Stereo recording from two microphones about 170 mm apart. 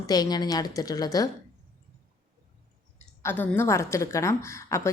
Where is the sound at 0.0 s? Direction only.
20° left (ahead or behind).